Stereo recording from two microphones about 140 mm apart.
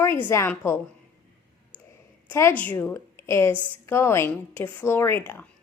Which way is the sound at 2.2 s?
15° left (ahead or behind).